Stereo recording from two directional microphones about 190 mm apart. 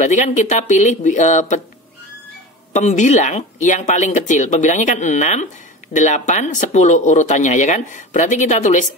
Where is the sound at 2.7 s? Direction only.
40° left (ahead or behind).